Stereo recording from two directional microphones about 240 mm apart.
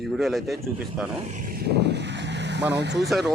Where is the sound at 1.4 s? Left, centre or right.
Right.